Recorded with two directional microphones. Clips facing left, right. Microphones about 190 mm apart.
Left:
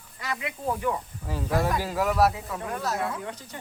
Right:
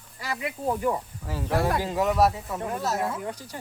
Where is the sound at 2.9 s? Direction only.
5° right (ahead or behind).